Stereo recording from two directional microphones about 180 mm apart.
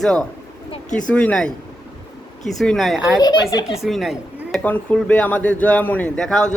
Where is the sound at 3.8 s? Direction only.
Centre (ahead or behind).